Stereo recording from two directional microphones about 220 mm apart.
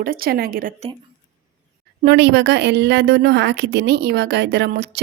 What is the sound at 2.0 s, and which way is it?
A woman's voice, 50° right (ahead or behind).